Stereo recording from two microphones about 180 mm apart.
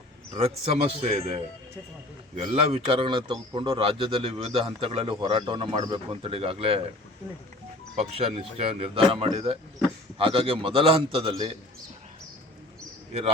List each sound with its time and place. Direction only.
0.3 s a man's voice: 35° right (ahead or behind)
7.9 s a man's voice: 35° right (ahead or behind)